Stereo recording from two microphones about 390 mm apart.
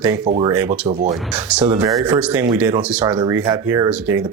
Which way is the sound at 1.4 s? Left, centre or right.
Centre.